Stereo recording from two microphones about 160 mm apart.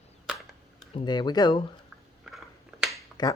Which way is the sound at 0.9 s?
25° left (ahead or behind).